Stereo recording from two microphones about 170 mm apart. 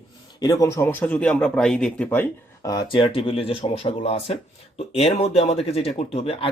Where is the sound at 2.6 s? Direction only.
20° left (ahead or behind).